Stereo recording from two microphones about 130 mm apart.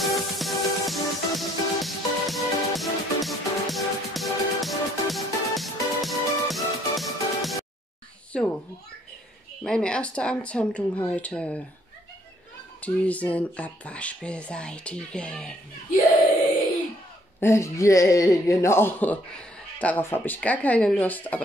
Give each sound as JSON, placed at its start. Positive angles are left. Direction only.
{"t": 0.0, "sound": "music", "side_deg": 0}
{"t": 8.3, "sound": "a child's voice", "side_deg": 5}
{"t": 9.6, "sound": "speech", "side_deg": 5}
{"t": 12.8, "sound": "speech", "side_deg": 10}
{"t": 17.4, "sound": "speech", "side_deg": 20}